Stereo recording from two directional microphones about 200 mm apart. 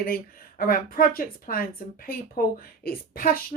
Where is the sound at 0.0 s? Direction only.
45° left (ahead or behind).